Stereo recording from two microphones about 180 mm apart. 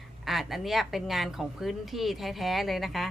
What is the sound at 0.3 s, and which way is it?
Speech, centre (ahead or behind).